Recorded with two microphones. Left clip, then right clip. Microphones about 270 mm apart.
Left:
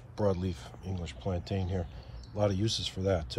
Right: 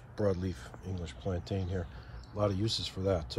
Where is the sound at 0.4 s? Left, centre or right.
Centre.